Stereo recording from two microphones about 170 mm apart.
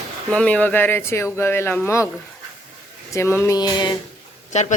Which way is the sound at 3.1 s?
15° left (ahead or behind).